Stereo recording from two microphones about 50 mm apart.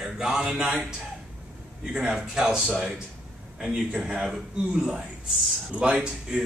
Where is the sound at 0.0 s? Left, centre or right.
Centre.